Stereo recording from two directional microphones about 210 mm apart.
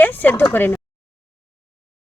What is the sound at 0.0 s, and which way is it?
Speech, 10° left (ahead or behind).